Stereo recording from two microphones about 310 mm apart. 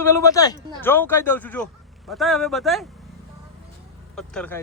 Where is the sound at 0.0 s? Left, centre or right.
Centre.